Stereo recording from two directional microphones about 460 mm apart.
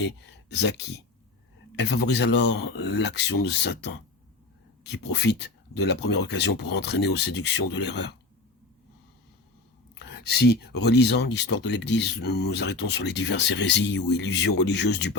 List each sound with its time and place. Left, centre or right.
0.2 s speech: left
5.1 s speech: left
9.9 s a sound: left
10.5 s speech: left